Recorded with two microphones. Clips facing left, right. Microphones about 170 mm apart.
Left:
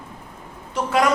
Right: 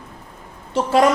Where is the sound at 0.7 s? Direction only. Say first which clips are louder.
Right 4 dB; 30° right (ahead or behind).